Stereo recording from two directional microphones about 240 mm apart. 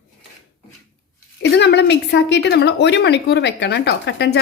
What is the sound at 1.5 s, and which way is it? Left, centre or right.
A woman's voice, left.